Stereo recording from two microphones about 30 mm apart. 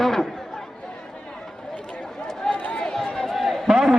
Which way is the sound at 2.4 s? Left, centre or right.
Left.